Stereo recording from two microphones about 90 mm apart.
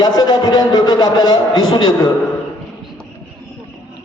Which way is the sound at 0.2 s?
50° left (ahead or behind).